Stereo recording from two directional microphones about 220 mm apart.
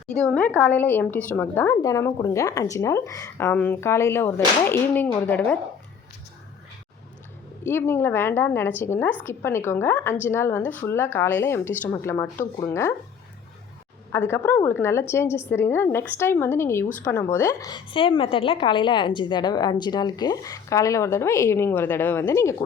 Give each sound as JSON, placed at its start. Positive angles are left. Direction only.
{"t": 0.2, "sound": "a woman's voice", "side_deg": 5}
{"t": 7.6, "sound": "a woman's voice", "side_deg": 10}
{"t": 14.1, "sound": "a woman's voice", "side_deg": 10}